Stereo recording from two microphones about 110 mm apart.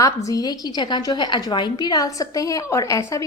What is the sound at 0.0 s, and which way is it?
A woman's voice, 30° left (ahead or behind).